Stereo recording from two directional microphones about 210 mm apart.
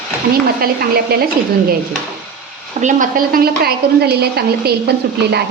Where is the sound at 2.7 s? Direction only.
35° right (ahead or behind).